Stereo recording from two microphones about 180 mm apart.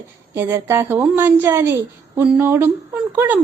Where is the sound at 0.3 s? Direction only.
15° right (ahead or behind).